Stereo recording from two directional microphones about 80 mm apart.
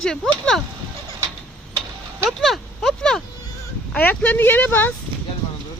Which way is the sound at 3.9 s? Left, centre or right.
Left.